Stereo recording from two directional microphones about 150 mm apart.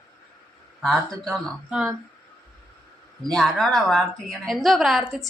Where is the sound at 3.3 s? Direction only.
Centre (ahead or behind).